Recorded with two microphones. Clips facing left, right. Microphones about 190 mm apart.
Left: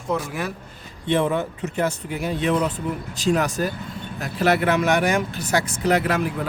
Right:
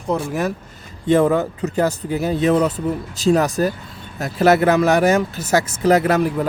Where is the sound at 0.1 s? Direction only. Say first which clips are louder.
Right 5 dB; 40° right (ahead or behind).